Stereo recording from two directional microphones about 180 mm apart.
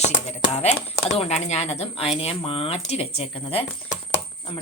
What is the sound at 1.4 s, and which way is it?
A woman's voice, 35° left (ahead or behind).